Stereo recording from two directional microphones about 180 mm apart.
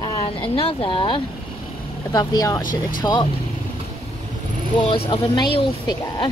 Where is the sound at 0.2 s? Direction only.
30° left (ahead or behind).